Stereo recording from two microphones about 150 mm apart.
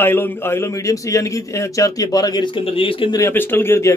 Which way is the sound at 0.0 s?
15° left (ahead or behind).